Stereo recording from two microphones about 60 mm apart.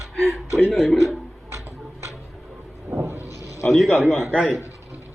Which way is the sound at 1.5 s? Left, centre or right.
Right.